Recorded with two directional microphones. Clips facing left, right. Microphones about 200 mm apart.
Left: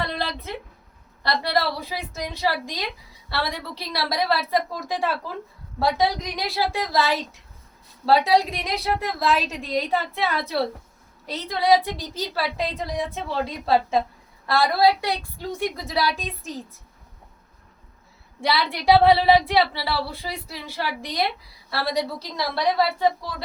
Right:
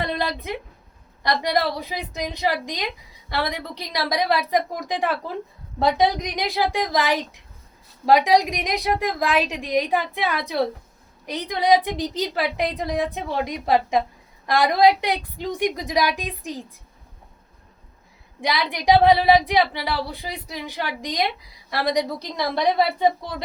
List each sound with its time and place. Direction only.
0.0 s a sound: 15° right (ahead or behind)
1.2 s a woman's voice: 15° right (ahead or behind)
18.3 s a woman's voice: 15° right (ahead or behind)